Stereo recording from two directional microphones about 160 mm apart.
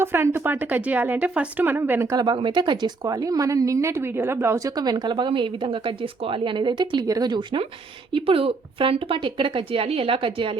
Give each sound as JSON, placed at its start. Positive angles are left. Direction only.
{"t": 0.0, "sound": "speech", "side_deg": -15}